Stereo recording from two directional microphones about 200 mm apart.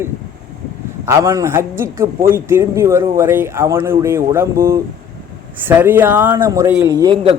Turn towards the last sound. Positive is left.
turn(degrees=-25)  # may be behind; listen again after turning